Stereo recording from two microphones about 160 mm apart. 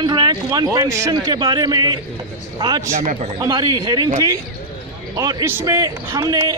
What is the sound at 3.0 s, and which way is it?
Speech, 45° right (ahead or behind).